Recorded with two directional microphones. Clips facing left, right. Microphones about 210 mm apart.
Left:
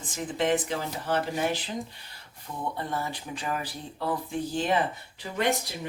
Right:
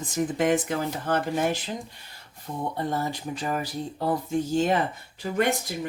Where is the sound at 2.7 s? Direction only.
40° right (ahead or behind).